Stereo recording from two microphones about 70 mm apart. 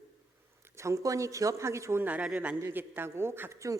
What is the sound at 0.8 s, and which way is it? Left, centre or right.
Speech, right.